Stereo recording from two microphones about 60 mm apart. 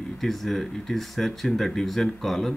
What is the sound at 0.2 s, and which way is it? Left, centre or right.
Speech, centre.